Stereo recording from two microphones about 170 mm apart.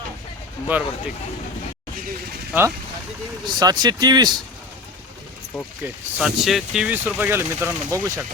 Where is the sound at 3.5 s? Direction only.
25° right (ahead or behind).